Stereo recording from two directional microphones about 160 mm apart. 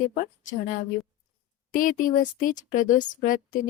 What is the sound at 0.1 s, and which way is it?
A woman's voice, 55° left (ahead or behind).